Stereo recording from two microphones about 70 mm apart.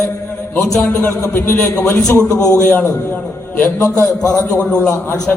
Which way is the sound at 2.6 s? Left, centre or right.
Left.